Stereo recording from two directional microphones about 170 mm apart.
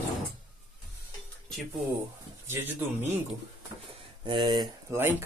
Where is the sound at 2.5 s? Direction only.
10° right (ahead or behind).